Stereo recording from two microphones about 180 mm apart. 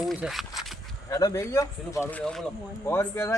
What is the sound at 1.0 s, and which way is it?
Speech, 20° left (ahead or behind).